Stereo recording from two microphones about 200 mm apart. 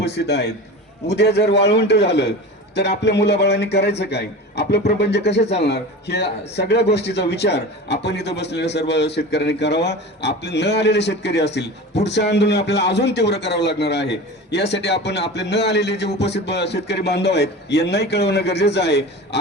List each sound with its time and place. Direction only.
0.0 s a man's voice: 55° left (ahead or behind)